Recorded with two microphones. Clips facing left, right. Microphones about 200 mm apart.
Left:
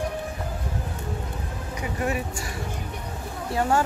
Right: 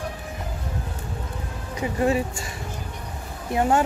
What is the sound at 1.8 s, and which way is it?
Speech, 25° right (ahead or behind).